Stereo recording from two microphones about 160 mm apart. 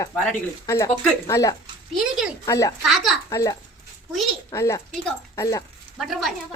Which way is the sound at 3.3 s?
20° left (ahead or behind).